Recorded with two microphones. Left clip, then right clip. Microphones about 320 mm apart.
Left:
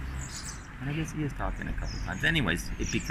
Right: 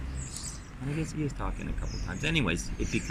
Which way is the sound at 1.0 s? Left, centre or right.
Centre.